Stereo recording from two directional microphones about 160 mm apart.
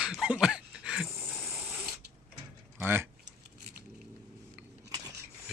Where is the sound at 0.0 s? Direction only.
5° right (ahead or behind).